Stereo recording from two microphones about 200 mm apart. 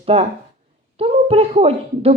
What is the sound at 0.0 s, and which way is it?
Speech, 30° right (ahead or behind).